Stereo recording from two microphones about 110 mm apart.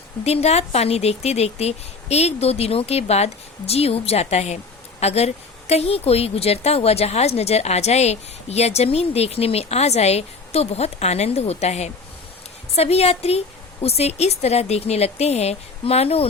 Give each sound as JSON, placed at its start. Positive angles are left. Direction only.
{"t": 0.3, "sound": "speech", "side_deg": 75}
{"t": 12.7, "sound": "speech", "side_deg": 70}